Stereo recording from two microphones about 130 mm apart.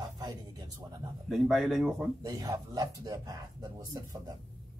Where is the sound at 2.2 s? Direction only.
30° right (ahead or behind).